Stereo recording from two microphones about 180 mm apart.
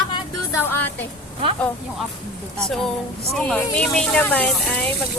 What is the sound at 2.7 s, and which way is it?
Speech, 5° left (ahead or behind).